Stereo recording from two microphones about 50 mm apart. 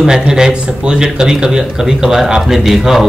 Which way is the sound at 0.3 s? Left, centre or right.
Centre.